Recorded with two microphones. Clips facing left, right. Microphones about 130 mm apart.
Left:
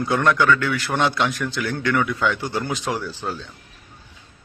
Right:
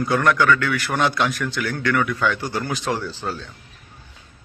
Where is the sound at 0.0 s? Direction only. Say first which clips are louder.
Even; 20° left (ahead or behind).